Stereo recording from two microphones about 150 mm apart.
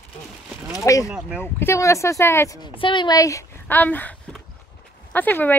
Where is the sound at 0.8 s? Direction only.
20° left (ahead or behind).